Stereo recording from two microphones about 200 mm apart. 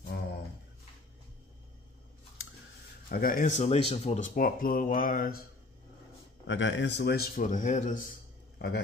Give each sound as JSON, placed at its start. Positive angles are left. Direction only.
{"t": 3.1, "sound": "speech", "side_deg": 45}
{"t": 6.4, "sound": "speech", "side_deg": 65}
{"t": 8.5, "sound": "a man's voice", "side_deg": 55}